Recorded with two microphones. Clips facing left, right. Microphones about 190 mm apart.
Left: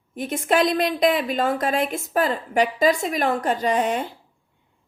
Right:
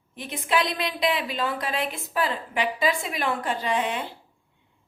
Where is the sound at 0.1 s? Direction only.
45° left (ahead or behind).